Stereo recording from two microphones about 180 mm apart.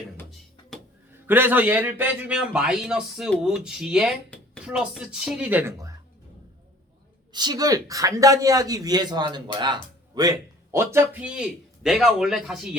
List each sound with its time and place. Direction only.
1.3 s a man's voice: 10° right (ahead or behind)
7.3 s speech: 20° right (ahead or behind); by 12.5 s centre (ahead or behind)